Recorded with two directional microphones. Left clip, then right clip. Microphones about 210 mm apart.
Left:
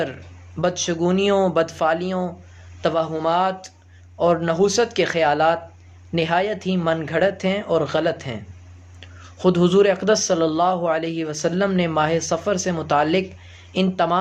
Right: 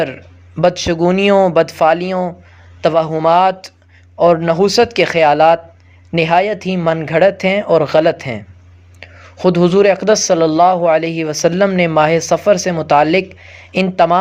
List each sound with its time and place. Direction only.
0.0 s speech: 35° right (ahead or behind)